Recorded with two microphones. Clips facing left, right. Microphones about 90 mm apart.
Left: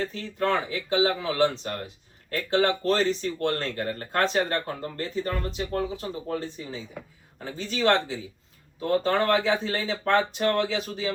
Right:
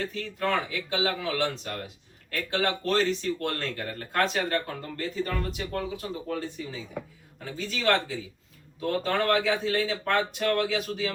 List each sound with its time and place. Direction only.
0.0 s speech: 35° left (ahead or behind)